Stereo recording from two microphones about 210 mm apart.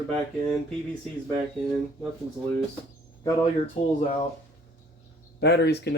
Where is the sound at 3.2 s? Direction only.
30° left (ahead or behind).